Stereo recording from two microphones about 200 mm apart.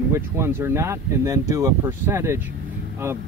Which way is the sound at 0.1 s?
10° right (ahead or behind).